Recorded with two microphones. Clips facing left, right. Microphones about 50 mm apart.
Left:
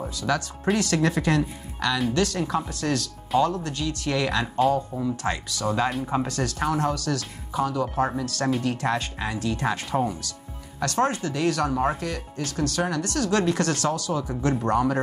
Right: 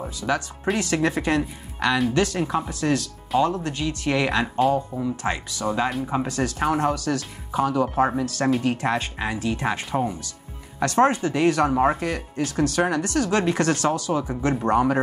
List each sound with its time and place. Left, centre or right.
0.2 s speech: right
5.9 s speech: centre; by 7.9 s right
7.9 s speech: centre
10.8 s speech: right